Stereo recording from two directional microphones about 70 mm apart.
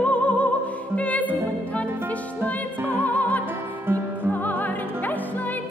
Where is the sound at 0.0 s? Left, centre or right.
Centre.